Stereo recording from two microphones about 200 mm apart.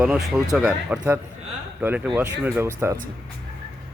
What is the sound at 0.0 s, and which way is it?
Speech, 5° right (ahead or behind).